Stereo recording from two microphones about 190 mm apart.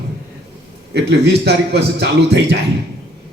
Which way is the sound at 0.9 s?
60° right (ahead or behind).